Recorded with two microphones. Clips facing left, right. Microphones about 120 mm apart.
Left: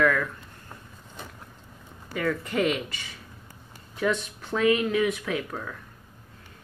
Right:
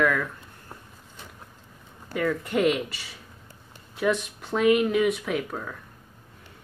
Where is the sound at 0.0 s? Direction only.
10° right (ahead or behind).